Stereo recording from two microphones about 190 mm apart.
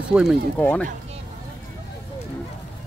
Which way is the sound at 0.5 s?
10° left (ahead or behind).